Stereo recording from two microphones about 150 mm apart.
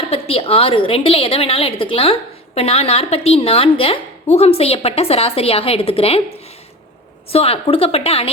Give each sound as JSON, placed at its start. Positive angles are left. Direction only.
{"t": 0.1, "sound": "a woman's voice", "side_deg": 40}
{"t": 7.3, "sound": "a woman's voice", "side_deg": 40}